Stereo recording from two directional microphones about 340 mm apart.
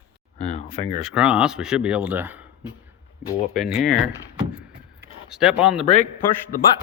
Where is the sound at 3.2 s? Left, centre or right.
Centre.